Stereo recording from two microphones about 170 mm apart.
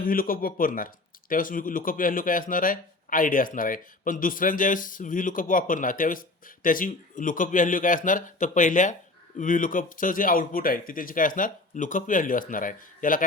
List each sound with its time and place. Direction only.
0.0 s speech: 55° left (ahead or behind)